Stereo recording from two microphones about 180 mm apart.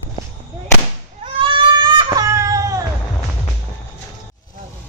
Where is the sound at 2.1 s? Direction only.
20° right (ahead or behind).